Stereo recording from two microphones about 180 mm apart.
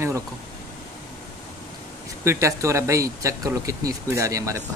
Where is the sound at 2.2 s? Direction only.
15° right (ahead or behind).